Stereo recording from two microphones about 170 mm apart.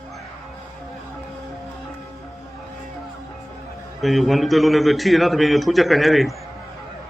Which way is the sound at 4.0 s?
Centre (ahead or behind).